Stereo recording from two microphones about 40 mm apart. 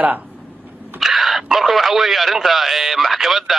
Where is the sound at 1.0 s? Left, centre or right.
Centre.